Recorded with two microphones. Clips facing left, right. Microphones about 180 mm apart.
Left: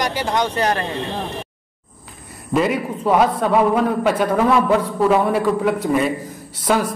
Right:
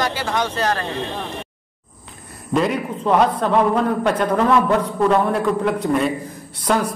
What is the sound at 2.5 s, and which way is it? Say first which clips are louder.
A man's voice: left 1 dB; 5° left (ahead or behind).